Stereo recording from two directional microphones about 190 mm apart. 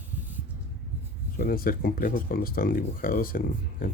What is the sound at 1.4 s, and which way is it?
Speech, 50° left (ahead or behind).